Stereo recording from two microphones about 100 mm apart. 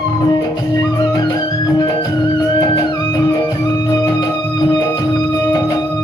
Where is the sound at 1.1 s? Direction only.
40° left (ahead or behind).